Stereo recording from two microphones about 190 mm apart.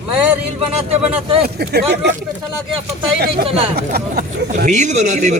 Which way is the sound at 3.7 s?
55° right (ahead or behind).